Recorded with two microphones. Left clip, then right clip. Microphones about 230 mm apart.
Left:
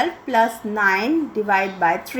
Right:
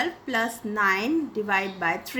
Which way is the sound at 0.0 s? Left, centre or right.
Centre.